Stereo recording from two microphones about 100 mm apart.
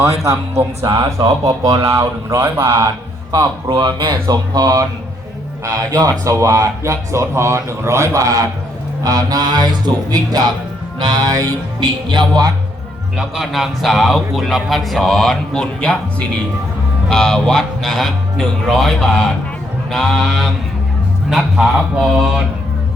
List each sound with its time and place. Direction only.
0.3 s speech: 30° right (ahead or behind)
3.3 s speech: 45° right (ahead or behind)
12.0 s speech: 50° right (ahead or behind)
13.1 s speech: centre (ahead or behind)